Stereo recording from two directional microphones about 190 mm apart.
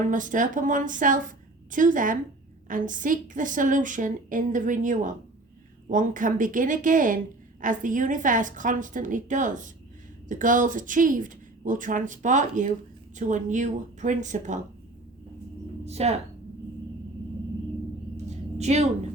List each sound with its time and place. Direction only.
0.1 s a woman's voice: 45° right (ahead or behind)
15.8 s speech: 35° right (ahead or behind)
18.3 s a sound: 35° right (ahead or behind)